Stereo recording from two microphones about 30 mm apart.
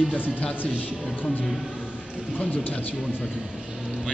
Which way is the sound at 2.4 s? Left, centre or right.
Left.